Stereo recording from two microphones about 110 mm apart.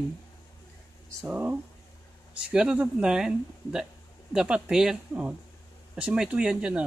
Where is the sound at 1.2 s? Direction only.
15° right (ahead or behind).